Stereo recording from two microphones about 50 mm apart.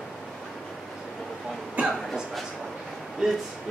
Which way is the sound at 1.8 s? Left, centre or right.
Right.